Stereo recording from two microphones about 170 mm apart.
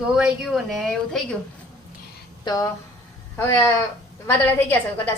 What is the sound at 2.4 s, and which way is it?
A woman's voice, 20° left (ahead or behind).